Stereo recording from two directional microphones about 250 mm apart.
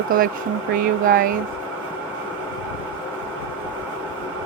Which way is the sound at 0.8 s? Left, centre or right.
Right.